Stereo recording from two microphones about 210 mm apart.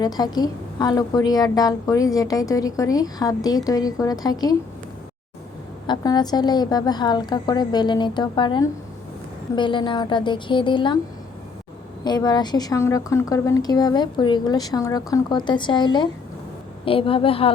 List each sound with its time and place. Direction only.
0.2 s a woman's voice: 20° left (ahead or behind)
5.9 s a woman's voice: 20° left (ahead or behind)
12.0 s a woman's voice: 20° left (ahead or behind)